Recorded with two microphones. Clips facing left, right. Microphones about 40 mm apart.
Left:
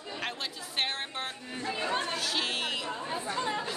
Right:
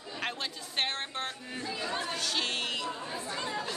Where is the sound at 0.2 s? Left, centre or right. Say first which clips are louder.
Right 2 dB; centre.